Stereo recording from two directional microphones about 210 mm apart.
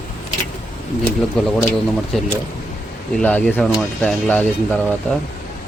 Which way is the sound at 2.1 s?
Centre (ahead or behind).